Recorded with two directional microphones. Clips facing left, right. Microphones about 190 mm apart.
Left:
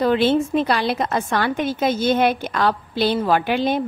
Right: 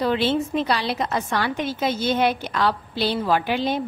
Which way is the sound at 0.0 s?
50° left (ahead or behind).